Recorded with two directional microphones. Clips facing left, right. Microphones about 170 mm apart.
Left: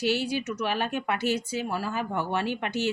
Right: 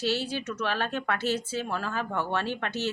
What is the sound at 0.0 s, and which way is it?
Speech, 15° left (ahead or behind).